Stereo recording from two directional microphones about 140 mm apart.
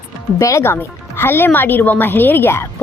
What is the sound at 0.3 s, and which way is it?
Speech, 20° left (ahead or behind).